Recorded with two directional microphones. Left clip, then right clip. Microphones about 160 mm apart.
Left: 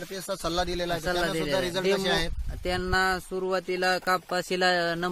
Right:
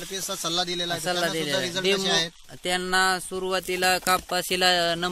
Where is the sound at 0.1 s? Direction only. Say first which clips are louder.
Right 2 dB; 75° left (ahead or behind).